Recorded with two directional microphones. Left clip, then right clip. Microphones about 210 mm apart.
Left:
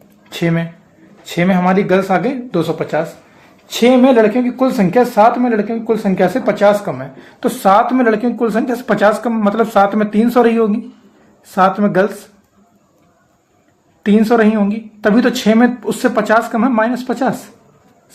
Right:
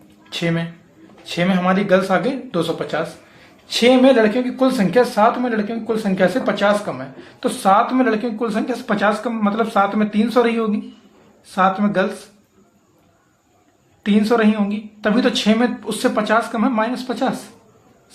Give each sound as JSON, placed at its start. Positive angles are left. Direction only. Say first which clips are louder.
{"t": 0.3, "sound": "speech", "louder": "left 4 dB", "side_deg": 35}
{"t": 14.0, "sound": "speech", "louder": "left 5 dB", "side_deg": 40}